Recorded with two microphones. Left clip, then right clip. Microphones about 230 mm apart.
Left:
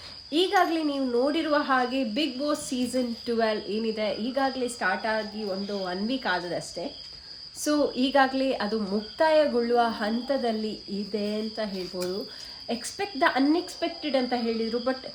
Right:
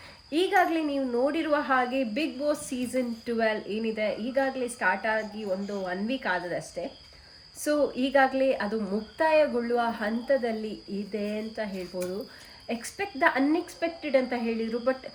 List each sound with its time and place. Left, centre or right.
0.3 s a woman's voice: centre